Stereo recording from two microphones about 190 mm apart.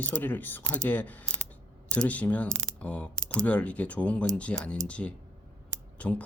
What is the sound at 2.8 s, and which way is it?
Ratchet, 5° left (ahead or behind).